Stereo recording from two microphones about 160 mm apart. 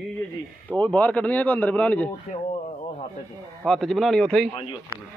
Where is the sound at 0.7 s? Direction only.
10° left (ahead or behind).